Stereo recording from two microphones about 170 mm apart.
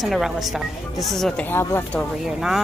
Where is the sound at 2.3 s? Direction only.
5° right (ahead or behind).